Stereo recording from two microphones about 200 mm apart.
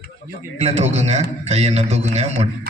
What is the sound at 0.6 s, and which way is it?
A man's voice, 30° right (ahead or behind).